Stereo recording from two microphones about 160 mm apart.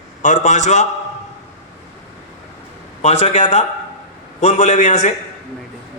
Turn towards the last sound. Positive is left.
turn(degrees=50)  # may be behind; listen again after turning